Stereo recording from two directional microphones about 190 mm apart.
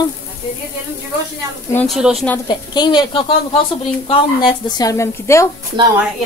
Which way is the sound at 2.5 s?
20° left (ahead or behind).